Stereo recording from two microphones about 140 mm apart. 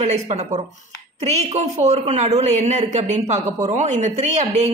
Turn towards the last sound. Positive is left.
turn(degrees=-55)  # may be behind; listen again after turning